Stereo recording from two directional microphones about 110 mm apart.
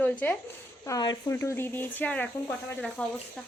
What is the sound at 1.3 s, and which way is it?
A woman's voice, 25° left (ahead or behind).